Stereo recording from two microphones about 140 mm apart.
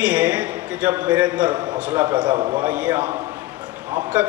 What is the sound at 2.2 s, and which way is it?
Speech, 35° right (ahead or behind).